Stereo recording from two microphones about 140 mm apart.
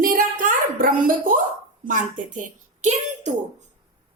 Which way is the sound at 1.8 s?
70° right (ahead or behind).